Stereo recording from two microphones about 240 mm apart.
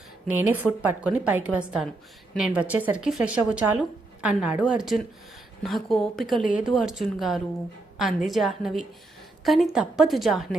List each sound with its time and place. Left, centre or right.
0.3 s a woman's voice: centre